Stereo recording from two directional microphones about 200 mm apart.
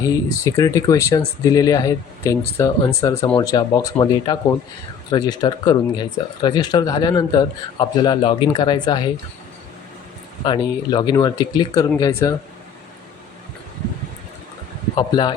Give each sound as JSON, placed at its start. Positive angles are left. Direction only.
{"t": 0.0, "sound": "speech", "side_deg": 15}
{"t": 10.4, "sound": "speech", "side_deg": 20}
{"t": 14.9, "sound": "speech", "side_deg": 20}